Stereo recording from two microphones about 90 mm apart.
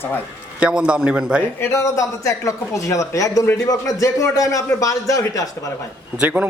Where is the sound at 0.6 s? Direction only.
10° right (ahead or behind).